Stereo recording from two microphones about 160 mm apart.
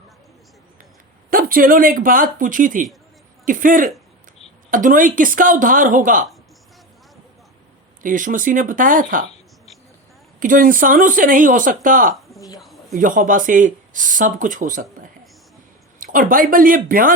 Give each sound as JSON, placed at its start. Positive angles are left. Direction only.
{"t": 1.3, "sound": "speech", "side_deg": -65}
{"t": 8.0, "sound": "speech", "side_deg": -55}
{"t": 10.4, "sound": "speech", "side_deg": -60}
{"t": 16.0, "sound": "speech", "side_deg": -60}